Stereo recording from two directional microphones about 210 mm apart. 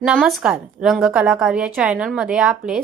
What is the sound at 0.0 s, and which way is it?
Speech, 5° right (ahead or behind).